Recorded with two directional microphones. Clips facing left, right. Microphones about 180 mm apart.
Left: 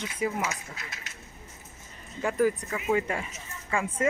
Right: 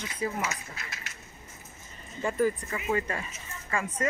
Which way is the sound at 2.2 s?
5° left (ahead or behind).